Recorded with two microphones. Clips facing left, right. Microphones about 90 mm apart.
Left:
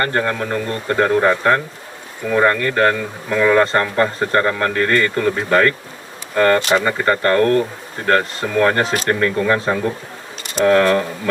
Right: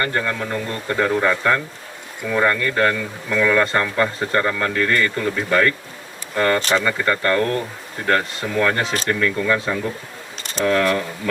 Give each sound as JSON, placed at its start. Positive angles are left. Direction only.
{"t": 0.0, "sound": "speech", "side_deg": 45}